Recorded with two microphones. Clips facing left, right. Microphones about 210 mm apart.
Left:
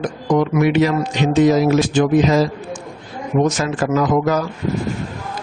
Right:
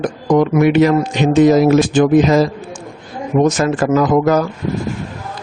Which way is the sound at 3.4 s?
50° right (ahead or behind).